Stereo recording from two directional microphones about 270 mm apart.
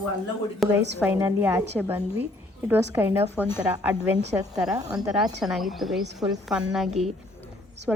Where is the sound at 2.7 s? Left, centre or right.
Centre.